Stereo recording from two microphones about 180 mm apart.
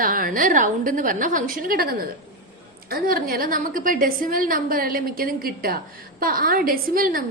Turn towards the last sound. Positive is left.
turn(degrees=-50)  # may be behind; listen again after turning